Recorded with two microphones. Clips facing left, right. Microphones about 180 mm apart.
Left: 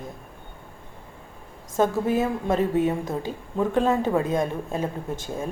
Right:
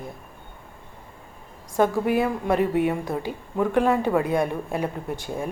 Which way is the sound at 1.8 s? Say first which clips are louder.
Right 1 dB; 15° right (ahead or behind).